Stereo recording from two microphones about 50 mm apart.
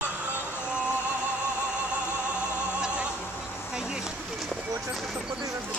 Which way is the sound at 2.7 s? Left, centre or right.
Centre.